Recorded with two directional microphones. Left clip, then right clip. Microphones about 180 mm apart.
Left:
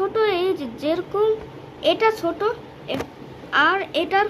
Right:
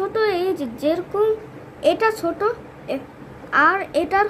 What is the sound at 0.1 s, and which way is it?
A woman's voice, 40° right (ahead or behind).